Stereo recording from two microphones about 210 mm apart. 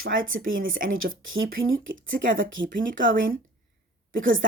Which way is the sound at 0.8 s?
70° right (ahead or behind).